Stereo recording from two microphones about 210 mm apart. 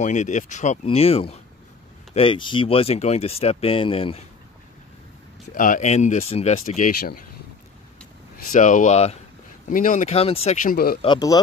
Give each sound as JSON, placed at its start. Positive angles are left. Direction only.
{"t": 0.0, "sound": "speech", "side_deg": 35}
{"t": 5.5, "sound": "speech", "side_deg": 40}
{"t": 8.5, "sound": "speech", "side_deg": 40}
{"t": 11.0, "sound": "speech", "side_deg": 20}